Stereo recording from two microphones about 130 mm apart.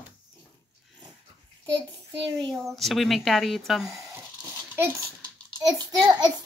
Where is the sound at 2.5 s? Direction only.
Centre (ahead or behind).